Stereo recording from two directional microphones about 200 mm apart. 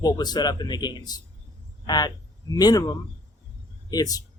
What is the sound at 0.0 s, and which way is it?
Speech, 20° left (ahead or behind).